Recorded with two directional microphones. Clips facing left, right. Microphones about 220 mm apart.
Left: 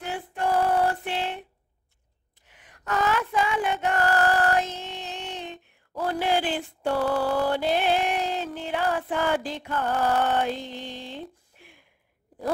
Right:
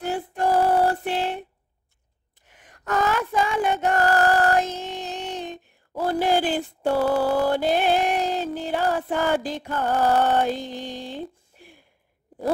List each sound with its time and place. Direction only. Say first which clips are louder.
0.0 s music: right 4 dB; 40° right (ahead or behind)
2.4 s female singing: right 4 dB; 45° right (ahead or behind)
8.5 s music: right 3 dB; 40° right (ahead or behind)